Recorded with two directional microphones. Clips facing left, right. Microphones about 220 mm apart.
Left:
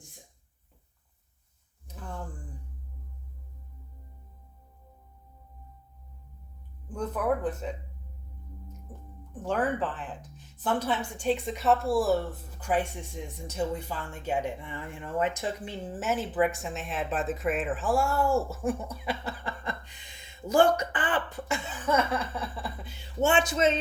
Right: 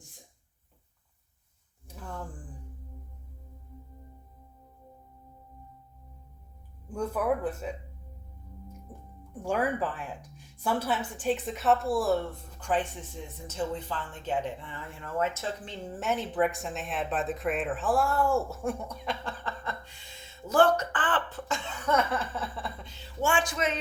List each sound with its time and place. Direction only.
6.8 s speech: 10° right (ahead or behind)
9.3 s a woman's voice: 10° right (ahead or behind); by 23.0 s 5° left (ahead or behind)
23.2 s speech: 20° left (ahead or behind)